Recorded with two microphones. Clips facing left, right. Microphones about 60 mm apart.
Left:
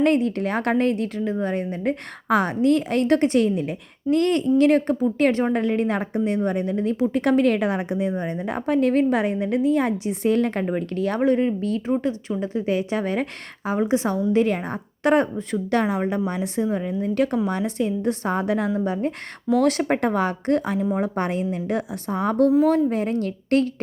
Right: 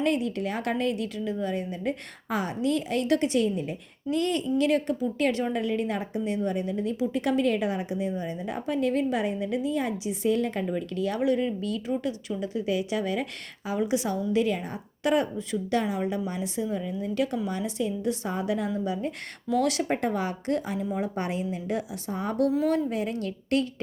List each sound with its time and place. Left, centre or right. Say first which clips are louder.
0.0 s a woman's voice: left 7 dB; left
14.3 s a woman's voice: left 5 dB; left
15.5 s a woman's voice: left 5 dB; left
20.7 s a woman's voice: left 7 dB; left
21.0 s a woman's voice: left 6 dB; left
22.4 s a woman's voice: left 7 dB; left